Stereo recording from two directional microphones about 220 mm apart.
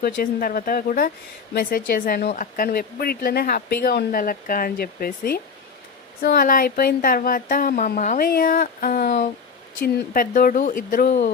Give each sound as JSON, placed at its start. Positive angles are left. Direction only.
{"t": 0.0, "sound": "speech", "side_deg": 40}